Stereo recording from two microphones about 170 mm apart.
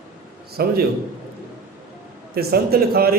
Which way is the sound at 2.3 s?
65° right (ahead or behind).